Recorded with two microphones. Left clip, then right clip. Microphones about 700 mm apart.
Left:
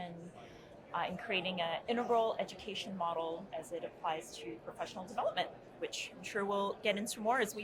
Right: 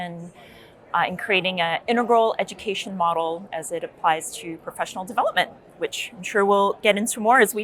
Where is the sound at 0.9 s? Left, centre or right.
Right.